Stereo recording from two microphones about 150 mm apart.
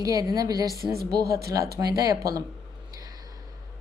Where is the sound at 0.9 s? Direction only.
90° right.